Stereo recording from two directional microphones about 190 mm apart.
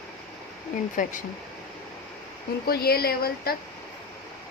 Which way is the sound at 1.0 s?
40° left (ahead or behind).